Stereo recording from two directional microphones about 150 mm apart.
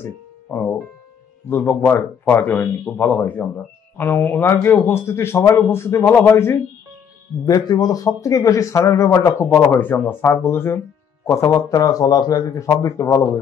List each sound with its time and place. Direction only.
0.0 s speech: 15° left (ahead or behind)